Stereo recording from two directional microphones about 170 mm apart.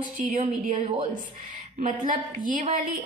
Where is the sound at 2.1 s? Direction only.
50° right (ahead or behind).